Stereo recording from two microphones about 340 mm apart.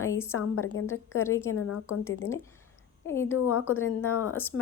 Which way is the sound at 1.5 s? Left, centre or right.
Left.